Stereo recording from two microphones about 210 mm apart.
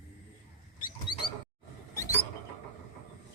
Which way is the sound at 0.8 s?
20° left (ahead or behind).